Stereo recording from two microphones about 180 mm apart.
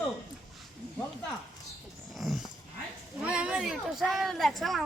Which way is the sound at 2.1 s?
Centre (ahead or behind).